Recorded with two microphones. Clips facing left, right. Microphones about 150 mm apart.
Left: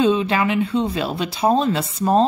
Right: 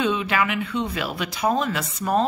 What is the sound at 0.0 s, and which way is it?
Speech, 30° left (ahead or behind).